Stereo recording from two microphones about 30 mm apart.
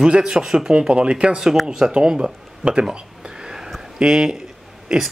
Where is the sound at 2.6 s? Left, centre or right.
Right.